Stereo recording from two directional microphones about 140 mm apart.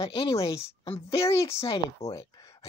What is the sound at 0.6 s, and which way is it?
Speech, 40° left (ahead or behind).